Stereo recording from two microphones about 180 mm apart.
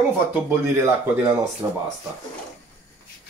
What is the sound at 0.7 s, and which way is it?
Speech, 15° right (ahead or behind).